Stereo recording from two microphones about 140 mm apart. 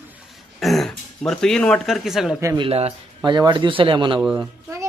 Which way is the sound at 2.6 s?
45° right (ahead or behind).